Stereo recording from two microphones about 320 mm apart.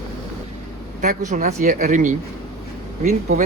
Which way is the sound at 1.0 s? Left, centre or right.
Right.